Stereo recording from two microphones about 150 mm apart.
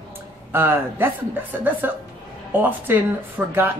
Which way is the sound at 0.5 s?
15° right (ahead or behind).